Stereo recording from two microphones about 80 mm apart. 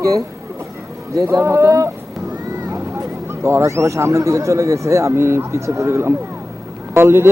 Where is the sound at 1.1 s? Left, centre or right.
Right.